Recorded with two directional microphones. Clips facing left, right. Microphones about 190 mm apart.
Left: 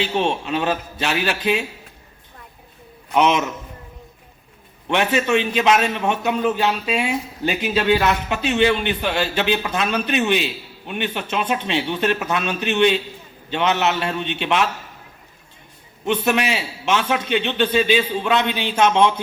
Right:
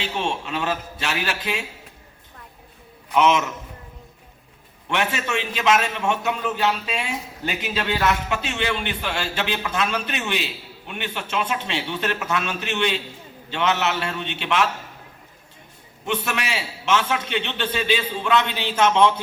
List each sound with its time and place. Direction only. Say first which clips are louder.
0.0 s a man's voice: left 5 dB; 20° left (ahead or behind)
3.2 s a man's voice: left 1 dB; 20° left (ahead or behind)
4.9 s a man's voice: left 6 dB; 20° left (ahead or behind)
16.0 s a man's voice: left 6 dB; 20° left (ahead or behind)